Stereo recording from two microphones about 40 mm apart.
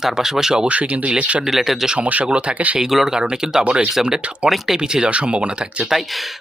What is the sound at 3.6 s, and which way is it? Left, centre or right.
Speech, right.